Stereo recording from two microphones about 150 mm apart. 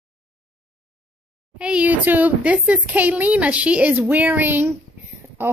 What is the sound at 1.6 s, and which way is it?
Speech, 5° right (ahead or behind).